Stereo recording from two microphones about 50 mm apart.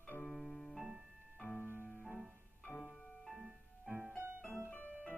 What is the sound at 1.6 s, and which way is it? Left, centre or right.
Music, right.